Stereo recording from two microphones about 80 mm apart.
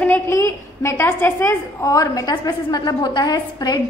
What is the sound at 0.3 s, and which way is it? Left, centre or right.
A woman's voice, left.